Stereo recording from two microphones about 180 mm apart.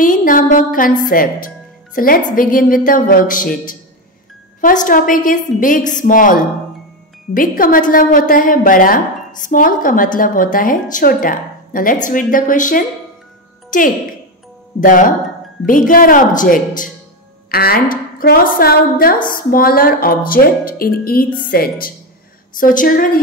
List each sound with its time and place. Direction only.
0.0 s a woman's voice: 50° left (ahead or behind)
4.6 s a woman's voice: 45° left (ahead or behind)